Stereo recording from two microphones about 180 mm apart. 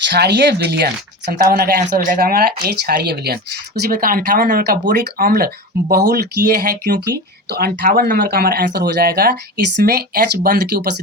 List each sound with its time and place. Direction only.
0.1 s speech: 70° right (ahead or behind)